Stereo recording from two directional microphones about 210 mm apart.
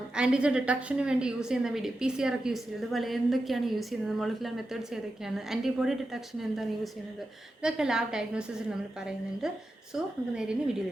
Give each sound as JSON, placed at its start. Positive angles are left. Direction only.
{"t": 0.2, "sound": "a woman's voice", "side_deg": -5}
{"t": 7.6, "sound": "a woman's voice", "side_deg": -5}
{"t": 9.9, "sound": "a woman's voice", "side_deg": -5}